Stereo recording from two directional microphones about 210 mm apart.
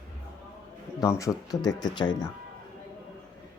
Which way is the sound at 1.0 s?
15° left (ahead or behind).